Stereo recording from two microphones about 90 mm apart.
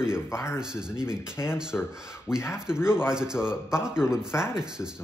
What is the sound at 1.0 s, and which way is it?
Speech, 30° left (ahead or behind).